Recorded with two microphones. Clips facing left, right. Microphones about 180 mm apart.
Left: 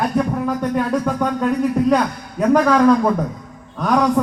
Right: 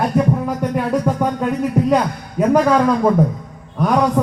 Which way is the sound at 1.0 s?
15° right (ahead or behind).